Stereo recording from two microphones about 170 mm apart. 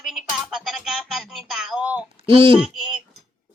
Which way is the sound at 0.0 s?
Centre (ahead or behind).